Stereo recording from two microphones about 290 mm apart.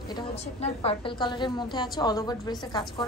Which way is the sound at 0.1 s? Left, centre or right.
Centre.